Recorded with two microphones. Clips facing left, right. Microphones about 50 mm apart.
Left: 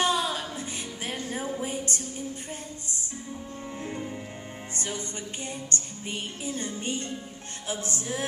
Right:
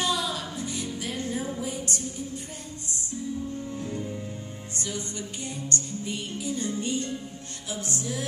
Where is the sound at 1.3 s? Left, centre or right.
Left.